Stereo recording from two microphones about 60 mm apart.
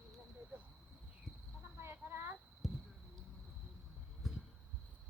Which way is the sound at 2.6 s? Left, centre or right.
Centre.